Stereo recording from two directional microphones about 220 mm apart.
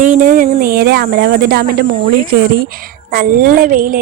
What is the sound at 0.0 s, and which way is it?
Speech, 35° right (ahead or behind).